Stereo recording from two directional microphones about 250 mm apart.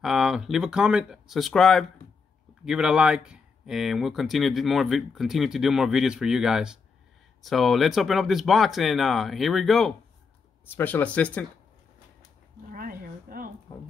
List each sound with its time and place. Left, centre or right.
0.0 s speech: centre
12.7 s a sound: right
13.7 s speech: centre